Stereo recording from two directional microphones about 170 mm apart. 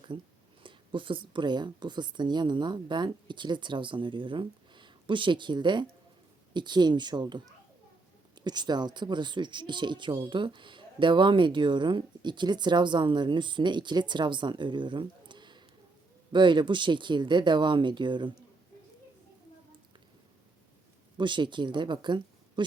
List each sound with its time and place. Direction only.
0.6 s speech: 30° right (ahead or behind)
21.2 s speech: 30° right (ahead or behind)